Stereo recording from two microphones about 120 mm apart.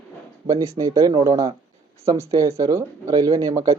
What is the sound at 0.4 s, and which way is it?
Speech, 25° right (ahead or behind).